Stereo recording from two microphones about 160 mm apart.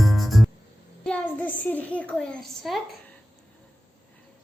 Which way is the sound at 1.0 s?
10° left (ahead or behind).